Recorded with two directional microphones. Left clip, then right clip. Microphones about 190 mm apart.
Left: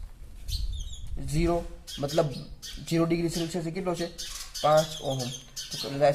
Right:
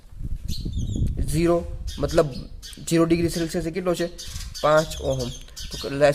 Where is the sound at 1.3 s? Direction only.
50° right (ahead or behind).